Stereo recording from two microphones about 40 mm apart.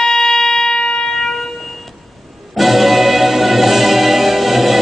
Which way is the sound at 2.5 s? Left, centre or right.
Centre.